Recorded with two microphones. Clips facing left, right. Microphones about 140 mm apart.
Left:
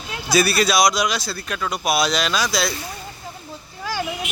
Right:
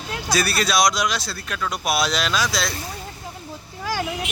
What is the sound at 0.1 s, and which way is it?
Speech, 5° left (ahead or behind).